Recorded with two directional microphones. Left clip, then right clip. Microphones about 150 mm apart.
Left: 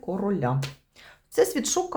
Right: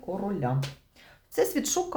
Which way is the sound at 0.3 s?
40° left (ahead or behind).